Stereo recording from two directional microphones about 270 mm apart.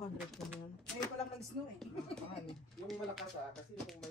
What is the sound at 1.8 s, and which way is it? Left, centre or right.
Speech, centre.